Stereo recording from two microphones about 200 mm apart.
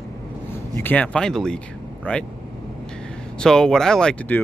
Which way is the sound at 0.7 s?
10° left (ahead or behind).